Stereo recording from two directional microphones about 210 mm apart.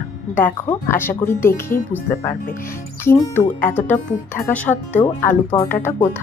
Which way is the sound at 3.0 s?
10° left (ahead or behind).